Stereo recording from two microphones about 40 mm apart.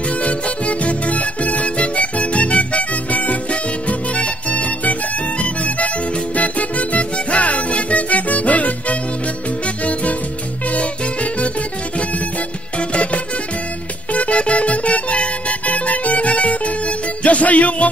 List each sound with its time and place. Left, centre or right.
0.2 s music: left
12.7 s music: left